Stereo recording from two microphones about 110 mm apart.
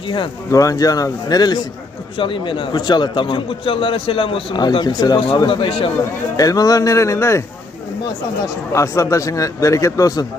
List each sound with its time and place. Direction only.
0.5 s speech: 30° left (ahead or behind)
2.1 s a man's voice: 50° left (ahead or behind)
4.6 s speech: 40° left (ahead or behind)
5.5 s a man's voice: 50° left (ahead or behind)
6.3 s speech: 35° left (ahead or behind)
8.7 s speech: 25° left (ahead or behind)